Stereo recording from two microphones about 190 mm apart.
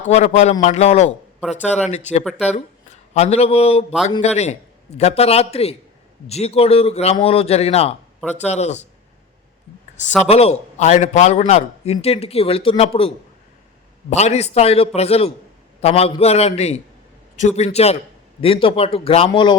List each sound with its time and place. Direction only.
0.0 s a man's voice: 35° left (ahead or behind)
10.2 s a man's voice: 30° left (ahead or behind)